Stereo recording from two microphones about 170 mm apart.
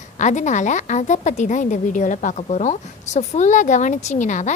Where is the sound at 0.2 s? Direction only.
45° left (ahead or behind).